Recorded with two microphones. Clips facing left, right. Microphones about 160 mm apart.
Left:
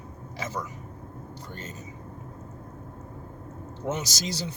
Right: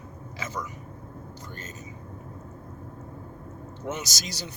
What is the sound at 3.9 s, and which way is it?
Speech, 30° left (ahead or behind).